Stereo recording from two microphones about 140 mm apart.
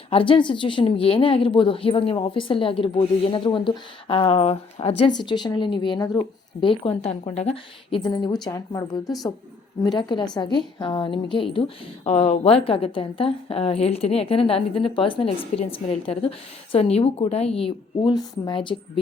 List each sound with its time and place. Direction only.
0.1 s a woman's voice: 40° left (ahead or behind)
18.1 s a woman's voice: 30° left (ahead or behind)